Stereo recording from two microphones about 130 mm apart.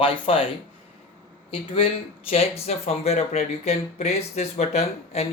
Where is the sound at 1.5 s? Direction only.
45° left (ahead or behind).